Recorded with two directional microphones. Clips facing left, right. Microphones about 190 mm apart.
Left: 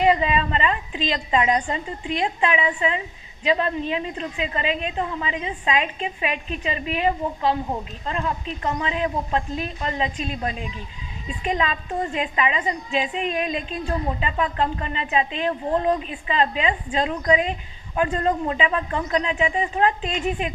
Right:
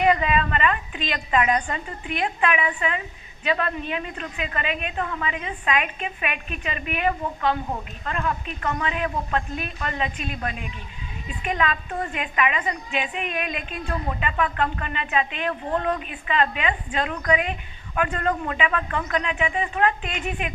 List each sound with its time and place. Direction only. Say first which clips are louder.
0.0 s a woman's voice: left 1 dB; 25° left (ahead or behind)